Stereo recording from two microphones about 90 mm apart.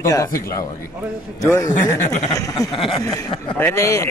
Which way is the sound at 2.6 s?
40° left (ahead or behind).